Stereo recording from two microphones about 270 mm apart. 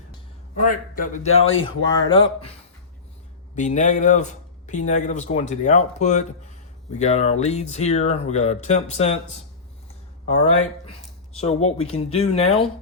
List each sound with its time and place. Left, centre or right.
0.5 s speech: left
1.2 s speech: left
3.5 s speech: left
10.2 s speech: left